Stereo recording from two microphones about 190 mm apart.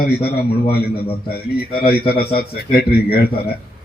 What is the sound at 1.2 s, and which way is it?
Speech, 55° left (ahead or behind).